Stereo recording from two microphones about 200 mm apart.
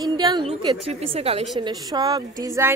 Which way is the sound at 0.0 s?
20° right (ahead or behind).